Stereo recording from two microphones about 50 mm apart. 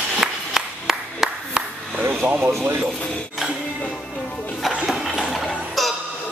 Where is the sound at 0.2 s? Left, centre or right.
Centre.